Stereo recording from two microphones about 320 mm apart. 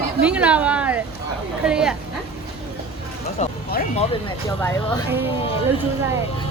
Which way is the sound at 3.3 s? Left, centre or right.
Left.